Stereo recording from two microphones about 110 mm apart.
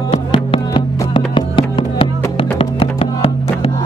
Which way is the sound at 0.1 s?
55° left (ahead or behind).